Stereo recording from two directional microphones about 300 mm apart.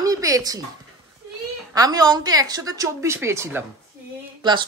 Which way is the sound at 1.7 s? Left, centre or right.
Centre.